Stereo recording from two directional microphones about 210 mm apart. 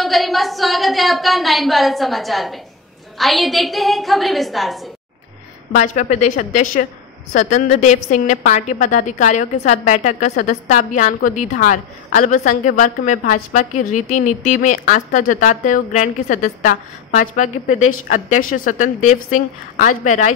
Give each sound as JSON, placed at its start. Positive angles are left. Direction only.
{"t": 0.0, "sound": "a woman's voice", "side_deg": 0}
{"t": 5.8, "sound": "a woman's voice", "side_deg": 35}
{"t": 20.1, "sound": "a woman's voice", "side_deg": 35}